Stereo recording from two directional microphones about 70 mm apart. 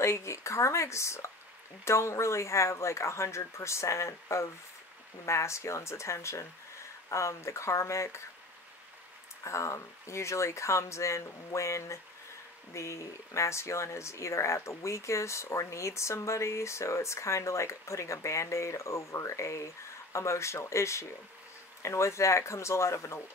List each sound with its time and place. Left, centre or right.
0.0 s speech: left
9.4 s speech: left